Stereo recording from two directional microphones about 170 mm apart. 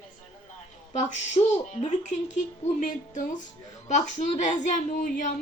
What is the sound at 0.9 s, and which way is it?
Speech, 45° left (ahead or behind).